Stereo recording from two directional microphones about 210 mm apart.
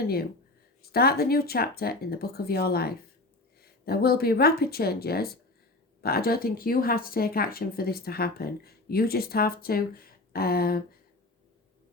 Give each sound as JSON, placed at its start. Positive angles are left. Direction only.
{"t": 0.0, "sound": "speech", "side_deg": 45}